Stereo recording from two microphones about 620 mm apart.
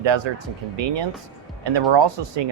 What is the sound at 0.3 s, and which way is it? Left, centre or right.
Speech, right.